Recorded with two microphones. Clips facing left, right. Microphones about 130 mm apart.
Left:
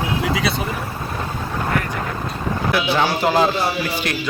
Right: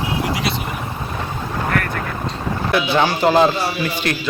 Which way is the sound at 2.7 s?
5° left (ahead or behind).